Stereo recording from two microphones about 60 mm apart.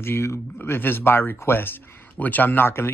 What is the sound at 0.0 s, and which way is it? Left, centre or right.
Speech, left.